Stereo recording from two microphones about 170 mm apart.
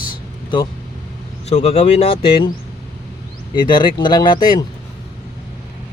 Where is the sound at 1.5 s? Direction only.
40° left (ahead or behind).